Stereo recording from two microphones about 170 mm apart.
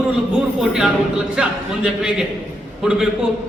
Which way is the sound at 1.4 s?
5° right (ahead or behind).